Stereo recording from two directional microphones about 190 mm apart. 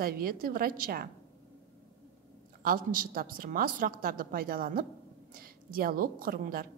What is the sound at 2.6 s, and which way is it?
A woman's voice, 50° right (ahead or behind).